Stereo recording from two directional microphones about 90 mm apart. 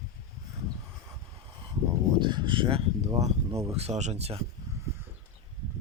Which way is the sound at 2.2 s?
60° right (ahead or behind).